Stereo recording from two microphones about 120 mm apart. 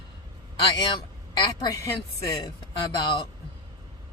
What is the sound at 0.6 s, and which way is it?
Speech, 40° left (ahead or behind).